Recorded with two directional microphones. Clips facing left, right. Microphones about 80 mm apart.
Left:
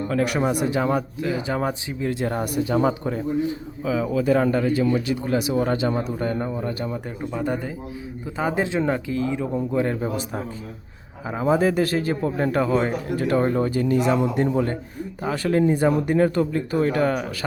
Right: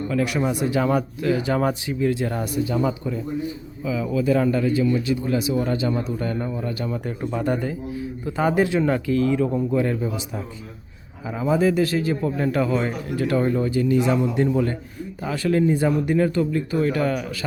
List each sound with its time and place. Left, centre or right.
0.1 s a man's voice: left
0.8 s speech: left
2.0 s a man's voice: left
6.1 s a man's voice: left
6.8 s speech: left
7.2 s speech: centre
7.4 s a man's voice: centre; by 10.1 s left
11.3 s a man's voice: left
14.2 s a man's voice: left